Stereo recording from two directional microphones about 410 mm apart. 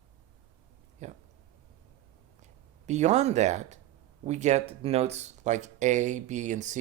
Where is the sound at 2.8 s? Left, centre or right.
Centre.